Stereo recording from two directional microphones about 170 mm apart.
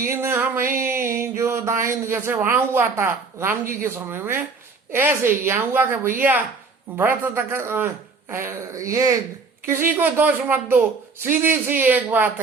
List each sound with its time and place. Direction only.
0.1 s speech: 15° right (ahead or behind)